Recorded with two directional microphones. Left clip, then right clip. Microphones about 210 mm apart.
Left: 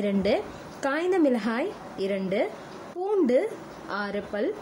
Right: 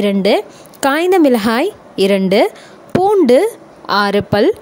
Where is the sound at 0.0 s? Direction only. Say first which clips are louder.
Right 12 dB; 40° right (ahead or behind).